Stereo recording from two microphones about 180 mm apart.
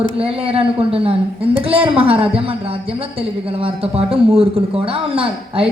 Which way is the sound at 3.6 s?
30° right (ahead or behind).